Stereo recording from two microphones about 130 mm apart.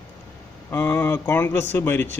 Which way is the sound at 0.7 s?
20° left (ahead or behind).